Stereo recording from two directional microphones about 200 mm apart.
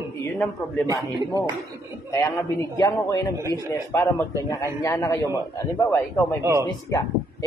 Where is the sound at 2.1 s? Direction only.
15° left (ahead or behind).